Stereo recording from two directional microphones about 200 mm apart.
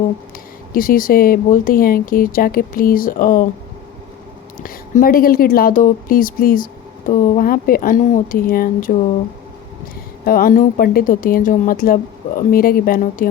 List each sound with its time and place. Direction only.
0.7 s speech: 45° left (ahead or behind)
4.6 s speech: 45° left (ahead or behind)
10.2 s speech: 45° left (ahead or behind)